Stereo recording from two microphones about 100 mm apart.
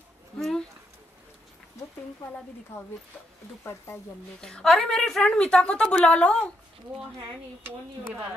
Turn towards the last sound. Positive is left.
turn(degrees=10)  # may be behind; listen again after turning